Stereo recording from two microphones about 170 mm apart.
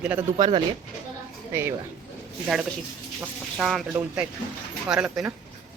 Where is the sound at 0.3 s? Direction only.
25° right (ahead or behind).